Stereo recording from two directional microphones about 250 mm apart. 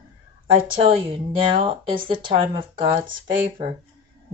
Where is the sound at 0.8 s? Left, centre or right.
Right.